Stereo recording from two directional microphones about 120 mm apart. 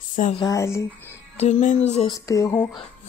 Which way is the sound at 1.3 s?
65° left (ahead or behind).